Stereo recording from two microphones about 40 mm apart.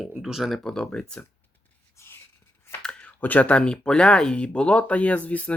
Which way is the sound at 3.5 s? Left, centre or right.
Left.